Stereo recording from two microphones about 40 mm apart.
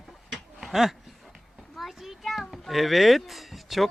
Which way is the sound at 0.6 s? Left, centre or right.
Centre.